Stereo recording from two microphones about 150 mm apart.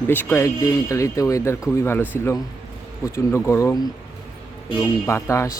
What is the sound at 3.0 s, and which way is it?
Speech, 20° left (ahead or behind).